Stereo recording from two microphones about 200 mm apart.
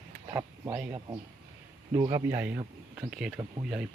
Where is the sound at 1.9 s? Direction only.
20° right (ahead or behind).